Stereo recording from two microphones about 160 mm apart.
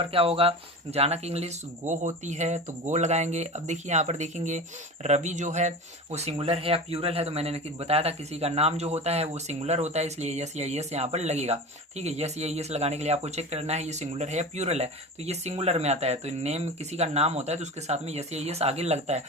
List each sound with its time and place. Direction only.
0.1 s speech: 35° right (ahead or behind)